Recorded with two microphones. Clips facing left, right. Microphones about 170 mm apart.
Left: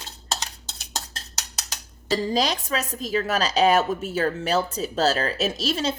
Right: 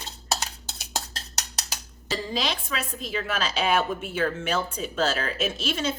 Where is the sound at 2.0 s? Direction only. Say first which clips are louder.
Left 6 dB; 40° left (ahead or behind).